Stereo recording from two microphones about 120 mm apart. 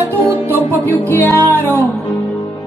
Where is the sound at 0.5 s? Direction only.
15° left (ahead or behind).